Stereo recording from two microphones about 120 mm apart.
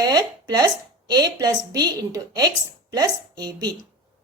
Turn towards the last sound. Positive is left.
turn(degrees=-35)  # may be behind; listen again after turning